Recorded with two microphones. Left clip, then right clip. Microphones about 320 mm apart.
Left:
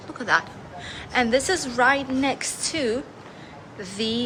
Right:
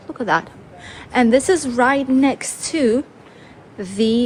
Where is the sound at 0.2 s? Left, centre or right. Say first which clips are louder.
Right 3 dB; centre.